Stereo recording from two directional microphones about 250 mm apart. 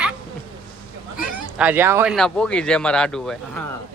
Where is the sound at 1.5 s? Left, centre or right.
Centre.